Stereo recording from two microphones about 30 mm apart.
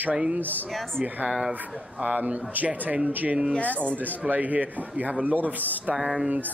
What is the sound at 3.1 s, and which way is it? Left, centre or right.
Speech, right.